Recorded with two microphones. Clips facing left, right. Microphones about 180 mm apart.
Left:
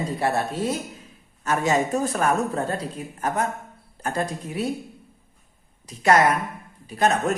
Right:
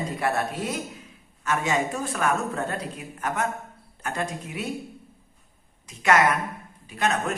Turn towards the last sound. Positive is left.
turn(degrees=40)  # may be behind; listen again after turning